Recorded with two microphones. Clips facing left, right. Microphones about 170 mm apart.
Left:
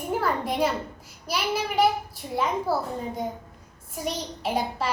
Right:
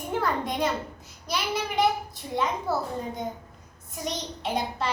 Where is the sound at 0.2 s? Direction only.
5° left (ahead or behind).